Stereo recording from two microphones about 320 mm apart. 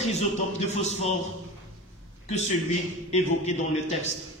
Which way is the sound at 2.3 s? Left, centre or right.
Left.